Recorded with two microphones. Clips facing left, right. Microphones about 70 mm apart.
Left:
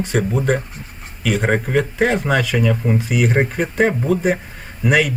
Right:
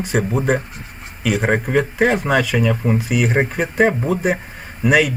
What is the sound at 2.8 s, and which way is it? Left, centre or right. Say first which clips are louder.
Speech: even; centre.